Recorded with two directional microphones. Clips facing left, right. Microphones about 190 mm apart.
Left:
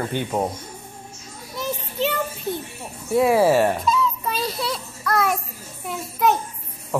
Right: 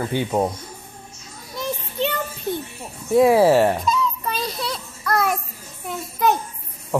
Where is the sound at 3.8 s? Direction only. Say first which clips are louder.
Left 1 dB; 5° left (ahead or behind).